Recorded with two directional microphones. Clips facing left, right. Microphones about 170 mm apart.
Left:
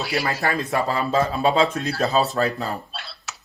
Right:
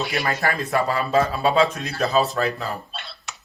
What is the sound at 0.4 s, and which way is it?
Speech, 25° left (ahead or behind).